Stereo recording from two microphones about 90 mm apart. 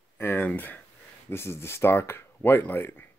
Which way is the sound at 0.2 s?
25° left (ahead or behind).